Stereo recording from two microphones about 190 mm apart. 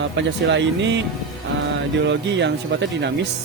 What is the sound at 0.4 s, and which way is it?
Speech, 70° right (ahead or behind).